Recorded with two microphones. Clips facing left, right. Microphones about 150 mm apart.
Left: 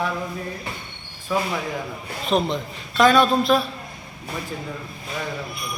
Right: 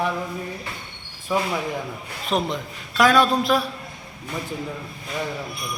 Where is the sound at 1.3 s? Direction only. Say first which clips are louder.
Right 1 dB; 15° right (ahead or behind).